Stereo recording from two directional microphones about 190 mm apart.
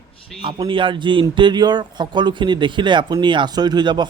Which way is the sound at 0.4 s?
25° right (ahead or behind).